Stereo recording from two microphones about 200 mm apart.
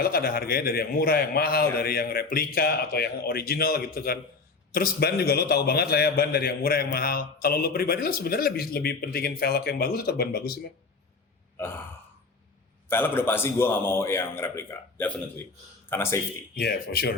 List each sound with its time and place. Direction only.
0.0 s a man's voice: 50° left (ahead or behind)
11.6 s gasp: 10° left (ahead or behind)
12.9 s a man's voice: 10° left (ahead or behind)
16.6 s a man's voice: 50° left (ahead or behind)